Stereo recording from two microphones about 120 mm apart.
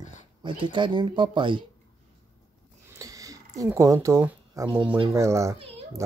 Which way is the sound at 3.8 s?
25° right (ahead or behind).